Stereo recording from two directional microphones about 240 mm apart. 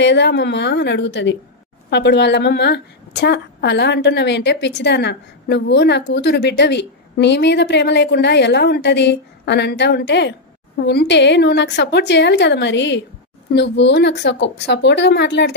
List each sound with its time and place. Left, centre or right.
0.0 s a woman's voice: left